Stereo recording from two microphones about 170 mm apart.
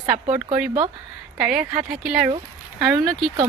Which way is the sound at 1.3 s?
5° right (ahead or behind).